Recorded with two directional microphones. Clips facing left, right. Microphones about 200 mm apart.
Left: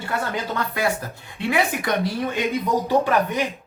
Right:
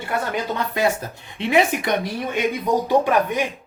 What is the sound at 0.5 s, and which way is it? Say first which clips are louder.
Speech: right 3 dB; 20° right (ahead or behind).